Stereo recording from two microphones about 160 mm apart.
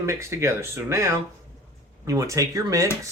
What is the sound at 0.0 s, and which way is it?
Speech, 15° right (ahead or behind).